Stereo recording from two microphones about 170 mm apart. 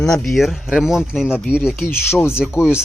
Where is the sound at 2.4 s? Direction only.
5° right (ahead or behind).